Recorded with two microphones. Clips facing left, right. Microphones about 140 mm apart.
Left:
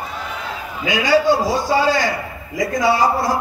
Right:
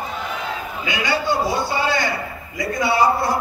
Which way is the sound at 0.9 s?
90° left.